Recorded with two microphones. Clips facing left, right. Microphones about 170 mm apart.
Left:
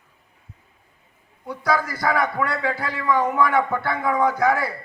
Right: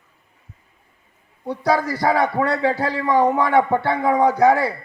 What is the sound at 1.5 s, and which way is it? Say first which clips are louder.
A man's voice: right 4 dB; 30° right (ahead or behind).